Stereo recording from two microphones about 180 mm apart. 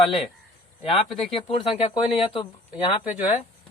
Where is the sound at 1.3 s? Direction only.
30° left (ahead or behind).